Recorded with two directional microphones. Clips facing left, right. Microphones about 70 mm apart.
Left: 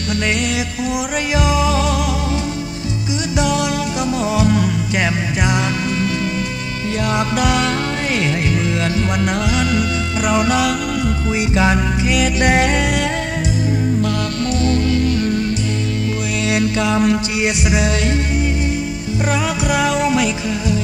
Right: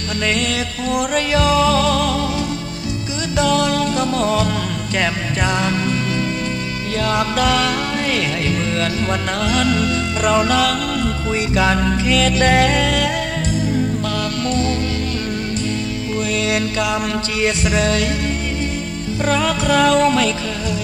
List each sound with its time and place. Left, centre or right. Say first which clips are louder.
0.1 s music: left 1 dB; centre
3.3 s music: right 3 dB; centre
7.0 s music: right 1 dB; left
16.3 s music: left 4 dB; left
19.2 s music: right 2 dB; centre